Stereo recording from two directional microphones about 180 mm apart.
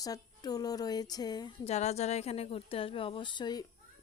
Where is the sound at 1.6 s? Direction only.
40° left (ahead or behind).